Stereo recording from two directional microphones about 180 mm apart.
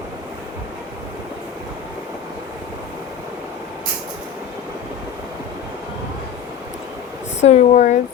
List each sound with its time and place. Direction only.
7.4 s speech: 40° left (ahead or behind)